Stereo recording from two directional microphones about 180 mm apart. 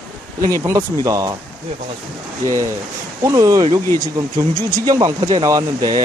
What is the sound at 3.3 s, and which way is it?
Speech, 20° right (ahead or behind).